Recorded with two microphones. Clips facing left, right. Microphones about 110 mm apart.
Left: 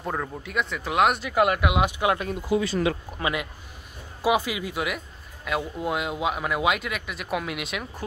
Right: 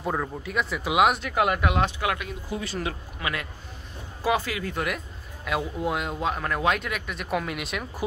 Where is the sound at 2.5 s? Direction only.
90° left.